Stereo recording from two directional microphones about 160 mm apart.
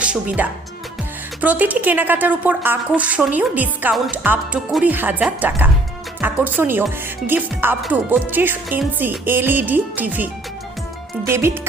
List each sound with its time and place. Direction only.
0.0 s a woman's voice: 10° right (ahead or behind)
11.3 s a woman's voice: 15° right (ahead or behind)